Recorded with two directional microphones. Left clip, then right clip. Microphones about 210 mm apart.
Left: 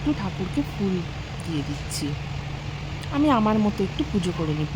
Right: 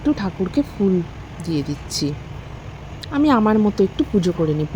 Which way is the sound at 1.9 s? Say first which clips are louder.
Right 8 dB; 20° right (ahead or behind).